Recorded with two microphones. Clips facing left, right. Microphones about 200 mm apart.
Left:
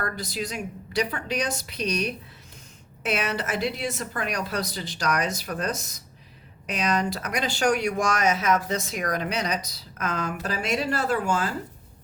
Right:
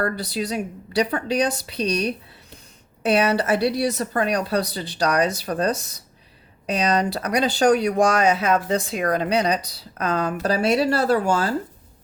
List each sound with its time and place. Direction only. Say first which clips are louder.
0.0 s speech: right 6 dB; 35° right (ahead or behind)